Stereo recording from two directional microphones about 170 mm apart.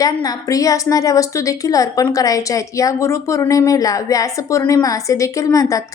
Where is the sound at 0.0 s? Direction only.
20° left (ahead or behind).